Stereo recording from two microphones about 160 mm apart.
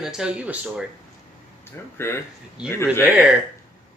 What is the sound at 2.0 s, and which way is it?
Speech, 15° left (ahead or behind).